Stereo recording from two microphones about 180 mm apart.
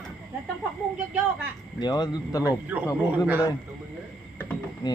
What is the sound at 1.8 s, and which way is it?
Speech, 25° left (ahead or behind).